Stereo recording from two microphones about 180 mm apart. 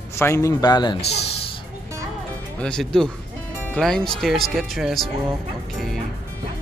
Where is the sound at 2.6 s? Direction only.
5° left (ahead or behind).